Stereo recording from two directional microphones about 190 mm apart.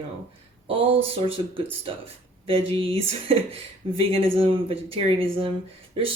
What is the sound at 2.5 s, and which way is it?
Speech, 30° right (ahead or behind).